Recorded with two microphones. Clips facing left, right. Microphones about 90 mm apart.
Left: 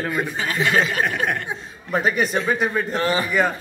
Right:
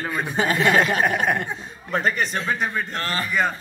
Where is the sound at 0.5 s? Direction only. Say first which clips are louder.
Even; centre (ahead or behind).